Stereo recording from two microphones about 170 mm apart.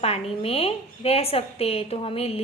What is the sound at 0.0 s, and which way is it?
A woman's voice, 35° left (ahead or behind).